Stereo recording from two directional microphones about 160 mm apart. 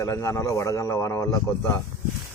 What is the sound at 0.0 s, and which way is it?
Speech, 20° left (ahead or behind).